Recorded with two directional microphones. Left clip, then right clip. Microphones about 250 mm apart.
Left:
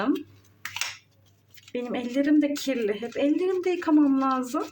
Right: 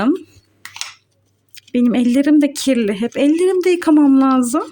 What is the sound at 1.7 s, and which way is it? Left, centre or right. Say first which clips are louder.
Speech: right 12 dB; right.